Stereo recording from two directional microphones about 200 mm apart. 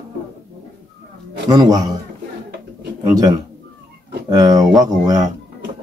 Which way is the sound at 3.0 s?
20° right (ahead or behind).